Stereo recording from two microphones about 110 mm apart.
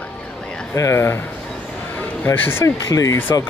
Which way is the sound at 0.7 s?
25° left (ahead or behind).